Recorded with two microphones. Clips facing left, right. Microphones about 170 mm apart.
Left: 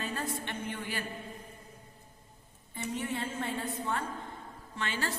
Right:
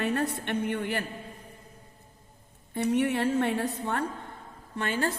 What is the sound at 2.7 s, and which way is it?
A woman's voice, 70° right (ahead or behind).